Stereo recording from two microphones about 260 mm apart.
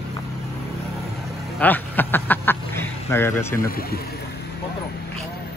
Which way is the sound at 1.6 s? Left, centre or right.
Centre.